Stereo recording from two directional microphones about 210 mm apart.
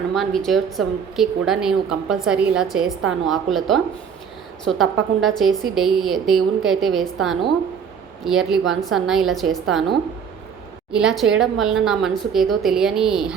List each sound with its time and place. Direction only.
0.1 s a woman's voice: centre (ahead or behind)
10.9 s a woman's voice: centre (ahead or behind)